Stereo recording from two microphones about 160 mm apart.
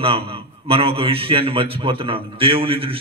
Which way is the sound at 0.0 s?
35° right (ahead or behind).